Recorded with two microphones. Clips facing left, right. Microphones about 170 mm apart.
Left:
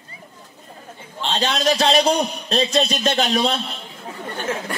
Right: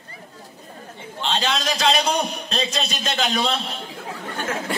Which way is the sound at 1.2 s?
40° left (ahead or behind).